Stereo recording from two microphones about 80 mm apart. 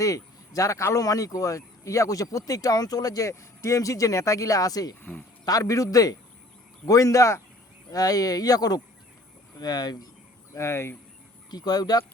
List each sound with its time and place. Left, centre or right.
0.0 s speech: left
7.9 s speech: left
10.5 s speech: left
11.5 s speech: left